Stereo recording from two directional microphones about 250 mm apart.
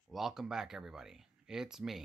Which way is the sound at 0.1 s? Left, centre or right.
Centre.